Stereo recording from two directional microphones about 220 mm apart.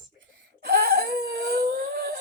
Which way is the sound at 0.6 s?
45° right (ahead or behind).